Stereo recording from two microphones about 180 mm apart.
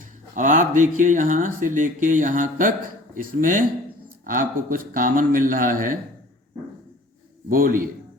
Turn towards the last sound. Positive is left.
turn(degrees=-50)  # may be behind; listen again after turning